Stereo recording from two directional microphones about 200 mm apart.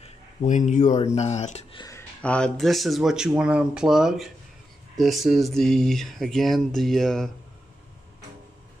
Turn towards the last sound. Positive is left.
turn(degrees=0)  # may be behind; listen again after turning